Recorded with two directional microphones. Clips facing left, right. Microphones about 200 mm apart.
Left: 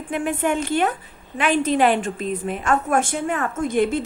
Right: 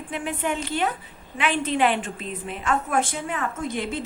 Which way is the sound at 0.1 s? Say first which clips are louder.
Left 6 dB; 50° left (ahead or behind).